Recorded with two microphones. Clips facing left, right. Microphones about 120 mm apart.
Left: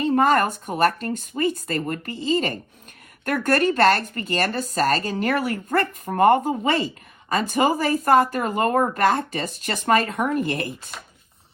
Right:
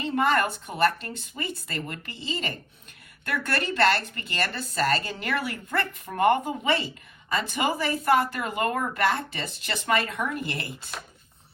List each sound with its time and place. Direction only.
0.0 s speech: 45° left (ahead or behind)